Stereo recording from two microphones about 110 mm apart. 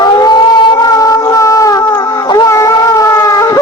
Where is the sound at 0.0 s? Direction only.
40° left (ahead or behind).